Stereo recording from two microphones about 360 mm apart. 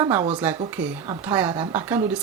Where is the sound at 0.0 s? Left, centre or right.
Centre.